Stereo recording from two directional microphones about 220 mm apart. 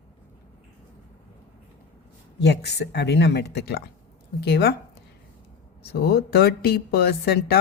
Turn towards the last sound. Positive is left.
turn(degrees=45)  # may be behind; listen again after turning